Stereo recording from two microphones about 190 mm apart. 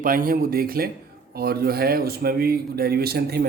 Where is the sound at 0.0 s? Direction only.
45° right (ahead or behind).